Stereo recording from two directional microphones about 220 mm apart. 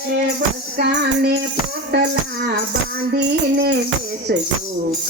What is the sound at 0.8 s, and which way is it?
Speech, 50° right (ahead or behind).